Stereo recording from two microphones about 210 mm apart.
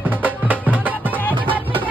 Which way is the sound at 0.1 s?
10° right (ahead or behind).